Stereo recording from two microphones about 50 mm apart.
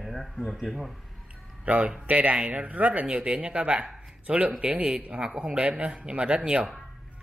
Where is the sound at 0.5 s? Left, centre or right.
Centre.